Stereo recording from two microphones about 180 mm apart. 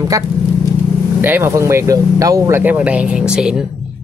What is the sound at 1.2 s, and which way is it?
Speech, 10° right (ahead or behind).